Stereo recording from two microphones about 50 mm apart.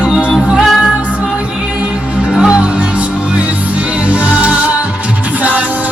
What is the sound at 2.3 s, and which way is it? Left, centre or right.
Music, centre.